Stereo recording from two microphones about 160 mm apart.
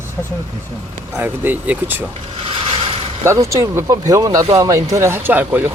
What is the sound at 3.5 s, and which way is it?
Speech, 20° right (ahead or behind).